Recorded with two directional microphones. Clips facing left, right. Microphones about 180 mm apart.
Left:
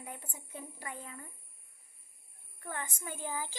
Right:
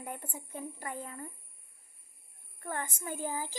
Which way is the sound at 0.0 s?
55° right (ahead or behind).